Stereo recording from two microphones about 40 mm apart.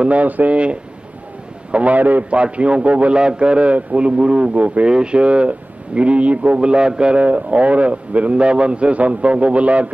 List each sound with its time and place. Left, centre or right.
0.0 s a man's voice: right
1.7 s a man's voice: right
2.3 s a man's voice: right
3.2 s speech: right
4.8 s speech: right
7.2 s a man's voice: right